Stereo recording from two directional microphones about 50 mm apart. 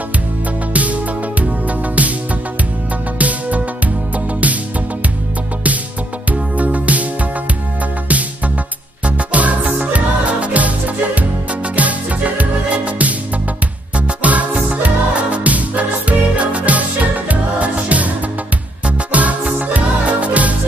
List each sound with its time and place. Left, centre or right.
0.7 s music: right
3.2 s music: right
6.3 s music: right
9.0 s music: right
11.7 s music: right